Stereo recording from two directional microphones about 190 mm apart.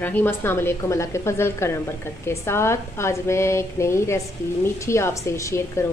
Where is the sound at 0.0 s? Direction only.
10° left (ahead or behind).